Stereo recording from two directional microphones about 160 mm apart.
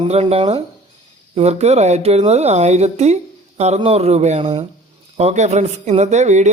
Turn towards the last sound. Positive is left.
turn(degrees=-45)  # may be behind; listen again after turning